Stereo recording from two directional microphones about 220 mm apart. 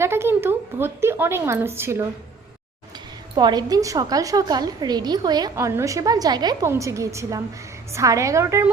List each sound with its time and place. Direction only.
0.0 s a woman's voice: 10° right (ahead or behind)
3.3 s a woman's voice: 20° right (ahead or behind)